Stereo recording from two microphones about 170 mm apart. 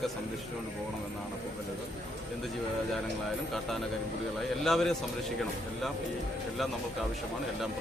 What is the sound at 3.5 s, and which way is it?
Speech, centre (ahead or behind).